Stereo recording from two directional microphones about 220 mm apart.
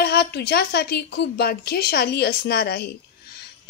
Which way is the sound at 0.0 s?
45° left (ahead or behind).